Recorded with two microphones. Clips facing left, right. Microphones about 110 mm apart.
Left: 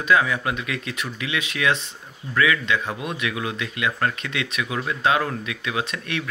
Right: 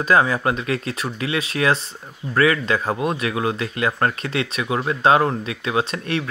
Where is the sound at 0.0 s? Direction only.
35° right (ahead or behind).